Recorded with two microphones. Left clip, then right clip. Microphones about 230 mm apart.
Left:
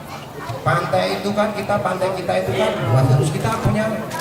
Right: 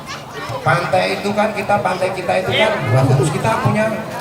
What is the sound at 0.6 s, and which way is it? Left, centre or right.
A man's voice, centre.